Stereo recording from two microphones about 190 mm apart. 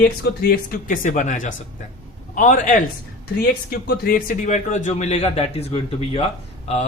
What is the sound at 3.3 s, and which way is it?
Speech, 55° left (ahead or behind).